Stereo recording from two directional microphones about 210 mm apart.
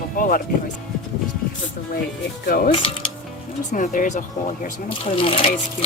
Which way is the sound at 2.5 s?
45° left (ahead or behind).